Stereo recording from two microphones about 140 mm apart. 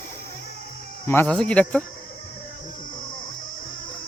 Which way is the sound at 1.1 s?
15° left (ahead or behind).